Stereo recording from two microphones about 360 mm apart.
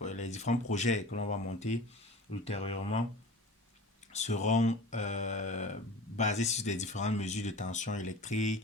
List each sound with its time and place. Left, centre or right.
0.0 s speech: centre
4.1 s speech: centre